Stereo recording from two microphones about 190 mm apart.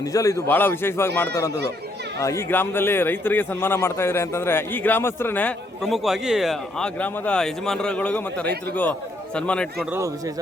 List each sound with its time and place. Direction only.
0.0 s a man's voice: 15° left (ahead or behind)
9.9 s speech: 15° right (ahead or behind)